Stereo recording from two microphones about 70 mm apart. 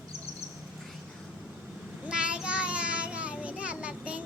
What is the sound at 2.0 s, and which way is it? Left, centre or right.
Child singing, centre.